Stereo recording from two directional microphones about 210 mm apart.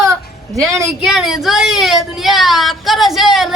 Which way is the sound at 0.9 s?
Centre (ahead or behind).